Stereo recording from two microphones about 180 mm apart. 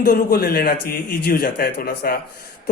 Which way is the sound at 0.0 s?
60° left (ahead or behind).